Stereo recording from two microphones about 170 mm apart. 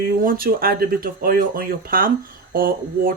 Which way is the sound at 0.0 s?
60° right (ahead or behind).